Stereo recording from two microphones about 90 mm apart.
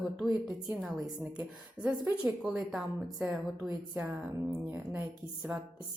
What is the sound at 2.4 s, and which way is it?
Speech, 5° right (ahead or behind).